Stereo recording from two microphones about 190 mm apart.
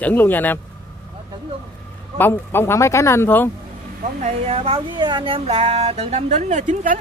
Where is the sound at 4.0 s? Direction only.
40° right (ahead or behind).